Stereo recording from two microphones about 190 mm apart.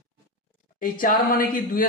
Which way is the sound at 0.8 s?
45° left (ahead or behind).